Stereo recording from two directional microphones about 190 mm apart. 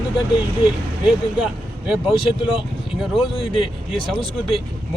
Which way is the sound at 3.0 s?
Centre (ahead or behind).